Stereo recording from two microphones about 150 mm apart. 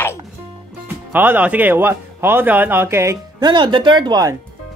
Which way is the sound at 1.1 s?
15° right (ahead or behind).